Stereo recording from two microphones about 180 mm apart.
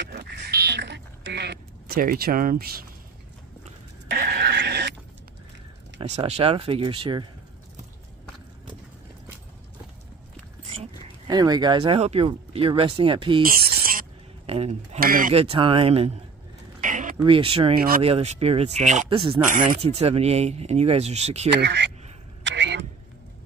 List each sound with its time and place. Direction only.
0.0 s duck: 70° right (ahead or behind)
4.1 s a sound: 55° right (ahead or behind)
5.9 s speech: 35° right (ahead or behind)
11.2 s speech: 20° right (ahead or behind)
13.4 s a sound: 55° right (ahead or behind)
14.4 s speech: 35° right (ahead or behind)
15.0 s speech: 50° right (ahead or behind)
15.3 s speech: 30° right (ahead or behind)
16.8 s a sound: 45° right (ahead or behind)
17.2 s speech: 30° right (ahead or behind)
19.0 s speech: 30° right (ahead or behind)
21.5 s speech: 70° right (ahead or behind)
22.4 s vehicle: 90° right